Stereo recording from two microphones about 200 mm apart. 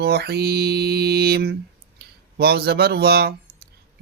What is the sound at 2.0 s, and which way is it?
Speech, 50° right (ahead or behind).